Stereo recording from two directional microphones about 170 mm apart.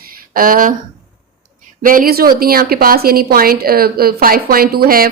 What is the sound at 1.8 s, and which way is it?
A woman's voice, 55° right (ahead or behind).